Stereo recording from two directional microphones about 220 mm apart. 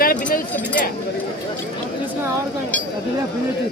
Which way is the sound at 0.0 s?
40° left (ahead or behind).